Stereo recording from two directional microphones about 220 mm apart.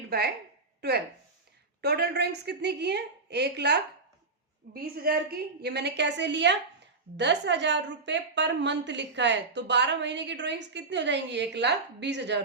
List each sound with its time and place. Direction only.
0.1 s a woman's voice: 45° right (ahead or behind)